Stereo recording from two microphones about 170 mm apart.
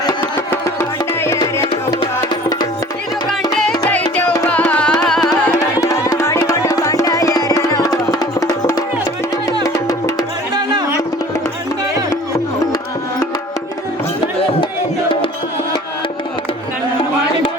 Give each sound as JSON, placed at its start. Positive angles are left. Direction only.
{"t": 0.5, "sound": "music", "side_deg": 15}
{"t": 3.7, "sound": "music", "side_deg": 10}
{"t": 5.8, "sound": "music", "side_deg": 20}
{"t": 10.5, "sound": "music", "side_deg": -25}